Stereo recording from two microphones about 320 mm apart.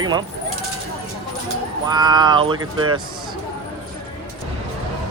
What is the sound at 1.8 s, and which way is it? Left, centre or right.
Speech, centre.